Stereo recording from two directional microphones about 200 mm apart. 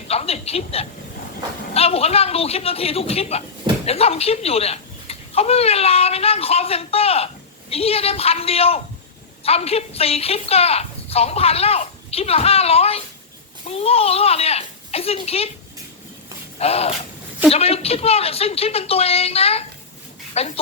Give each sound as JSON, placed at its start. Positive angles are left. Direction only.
{"t": 0.1, "sound": "a sound", "side_deg": 30}
{"t": 1.7, "sound": "a woman's voice", "side_deg": 30}
{"t": 16.6, "sound": "a woman's voice", "side_deg": 30}